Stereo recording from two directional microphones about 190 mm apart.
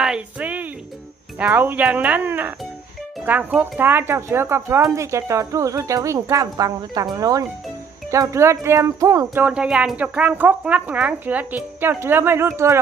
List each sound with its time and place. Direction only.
0.0 s music: 5° right (ahead or behind)
1.4 s speech: 10° right (ahead or behind)